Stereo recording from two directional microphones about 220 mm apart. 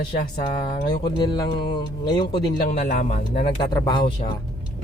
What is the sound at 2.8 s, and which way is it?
Speech, 35° left (ahead or behind).